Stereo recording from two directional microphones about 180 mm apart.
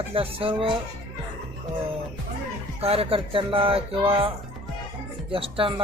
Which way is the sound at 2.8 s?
30° right (ahead or behind).